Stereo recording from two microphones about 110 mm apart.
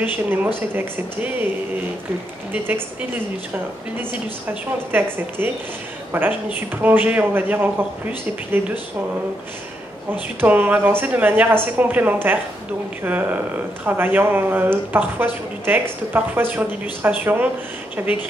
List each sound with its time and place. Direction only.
0.0 s speech: 15° right (ahead or behind)
4.9 s speech: 20° right (ahead or behind)
10.4 s speech: 15° right (ahead or behind)